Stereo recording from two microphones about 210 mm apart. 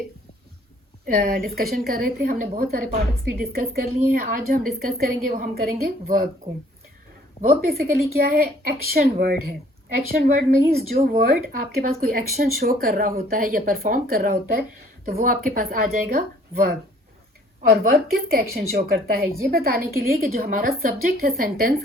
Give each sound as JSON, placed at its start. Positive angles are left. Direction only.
{"t": 1.0, "sound": "a woman's voice", "side_deg": -40}
{"t": 7.7, "sound": "a woman's voice", "side_deg": -45}